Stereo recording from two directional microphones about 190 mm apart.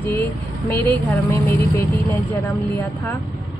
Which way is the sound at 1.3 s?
15° left (ahead or behind).